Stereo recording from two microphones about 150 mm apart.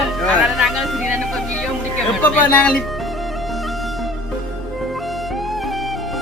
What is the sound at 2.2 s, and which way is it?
Bagpipes, 5° left (ahead or behind).